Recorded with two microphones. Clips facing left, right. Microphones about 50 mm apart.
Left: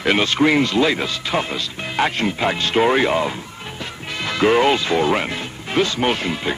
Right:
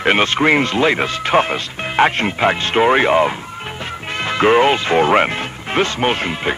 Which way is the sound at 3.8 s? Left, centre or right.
Right.